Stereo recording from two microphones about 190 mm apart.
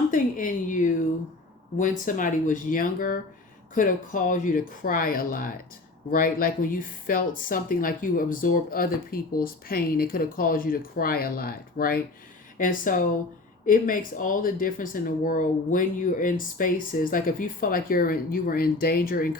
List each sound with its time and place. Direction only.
0.1 s speech: 45° left (ahead or behind)